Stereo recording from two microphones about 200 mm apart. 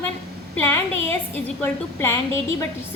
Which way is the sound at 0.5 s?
10° left (ahead or behind).